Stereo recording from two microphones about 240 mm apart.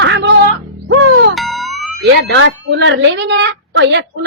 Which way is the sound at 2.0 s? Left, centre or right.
Right.